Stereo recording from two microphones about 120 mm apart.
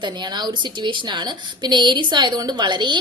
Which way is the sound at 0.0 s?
35° right (ahead or behind).